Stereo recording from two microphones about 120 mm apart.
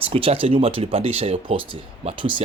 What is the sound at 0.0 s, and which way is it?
Speech, 50° right (ahead or behind).